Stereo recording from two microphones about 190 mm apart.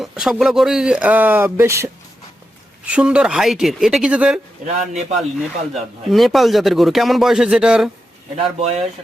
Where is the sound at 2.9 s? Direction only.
5° right (ahead or behind).